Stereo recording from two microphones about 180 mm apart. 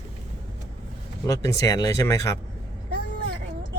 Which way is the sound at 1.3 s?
15° left (ahead or behind).